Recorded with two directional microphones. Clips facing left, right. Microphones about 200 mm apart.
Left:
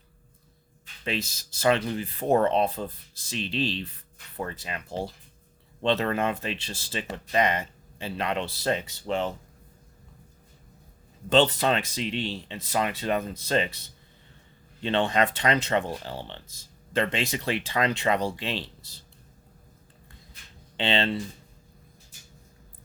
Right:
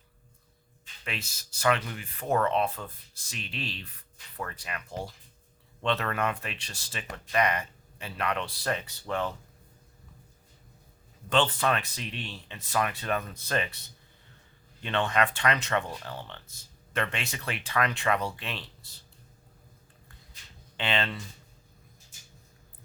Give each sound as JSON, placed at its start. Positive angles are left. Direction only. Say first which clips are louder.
{"t": 1.6, "sound": "speech", "louder": "left 4 dB", "side_deg": 30}
{"t": 11.3, "sound": "speech", "louder": "left 5 dB", "side_deg": 25}
{"t": 14.8, "sound": "speech", "louder": "left 3 dB", "side_deg": 25}
{"t": 20.7, "sound": "speech", "louder": "left 5 dB", "side_deg": 30}